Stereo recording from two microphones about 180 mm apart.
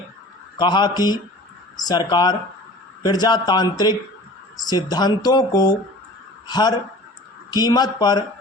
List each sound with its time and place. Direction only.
0.5 s speech: 25° left (ahead or behind)